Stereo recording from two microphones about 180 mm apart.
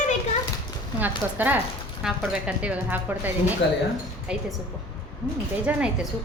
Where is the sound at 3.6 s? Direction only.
75° left (ahead or behind).